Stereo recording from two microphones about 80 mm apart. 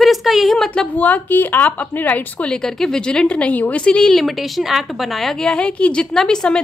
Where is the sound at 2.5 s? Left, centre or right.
Centre.